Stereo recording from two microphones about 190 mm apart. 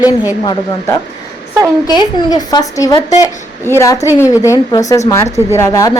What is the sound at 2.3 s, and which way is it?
A woman's voice, 20° left (ahead or behind).